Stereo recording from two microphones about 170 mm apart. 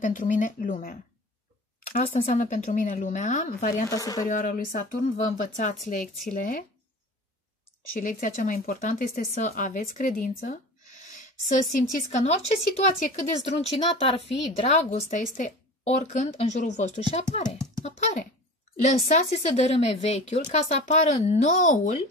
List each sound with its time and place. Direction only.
0.0 s speech: 50° left (ahead or behind)
2.0 s speech: 45° left (ahead or behind)
3.9 s speech: 20° left (ahead or behind)
4.3 s speech: 55° left (ahead or behind)
8.0 s speech: 55° left (ahead or behind)
11.1 s a sound: 50° left (ahead or behind)
12.1 s speech: 45° left (ahead or behind)